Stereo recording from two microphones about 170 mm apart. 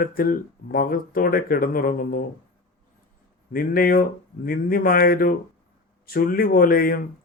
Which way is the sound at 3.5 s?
55° left (ahead or behind).